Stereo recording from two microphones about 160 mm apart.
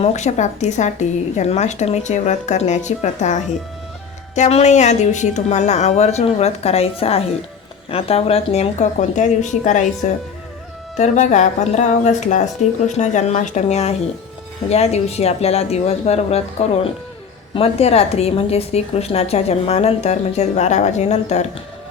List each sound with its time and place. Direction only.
0.0 s a woman's voice: 45° left (ahead or behind)